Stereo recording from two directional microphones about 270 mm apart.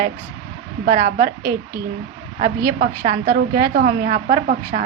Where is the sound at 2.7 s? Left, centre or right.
Right.